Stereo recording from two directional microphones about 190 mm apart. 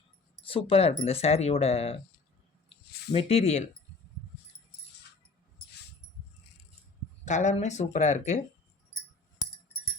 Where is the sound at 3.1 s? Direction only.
35° left (ahead or behind).